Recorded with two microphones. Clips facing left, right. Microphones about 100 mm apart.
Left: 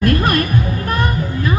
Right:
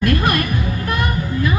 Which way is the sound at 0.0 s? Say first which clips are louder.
Left 2 dB; 40° left (ahead or behind).